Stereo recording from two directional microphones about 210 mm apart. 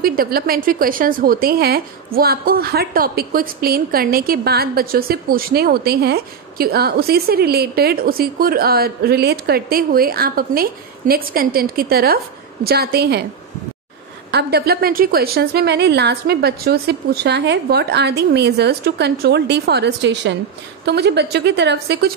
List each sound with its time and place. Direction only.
0.0 s a woman's voice: 45° right (ahead or behind)
14.3 s a woman's voice: 50° right (ahead or behind)